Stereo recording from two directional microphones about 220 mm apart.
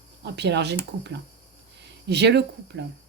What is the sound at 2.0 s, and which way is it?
Speech, 50° right (ahead or behind).